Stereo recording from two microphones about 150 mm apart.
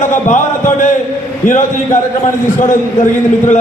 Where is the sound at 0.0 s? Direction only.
55° left (ahead or behind).